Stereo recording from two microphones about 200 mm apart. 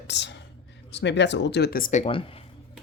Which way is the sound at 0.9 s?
60° left (ahead or behind).